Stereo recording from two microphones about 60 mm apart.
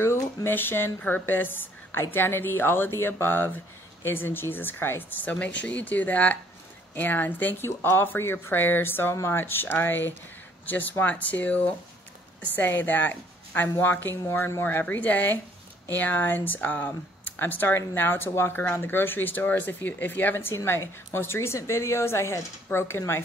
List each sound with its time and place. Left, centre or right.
0.0 s a woman's voice: left
5.3 s a woman's voice: left
9.1 s a woman's voice: left
20.6 s a woman's voice: left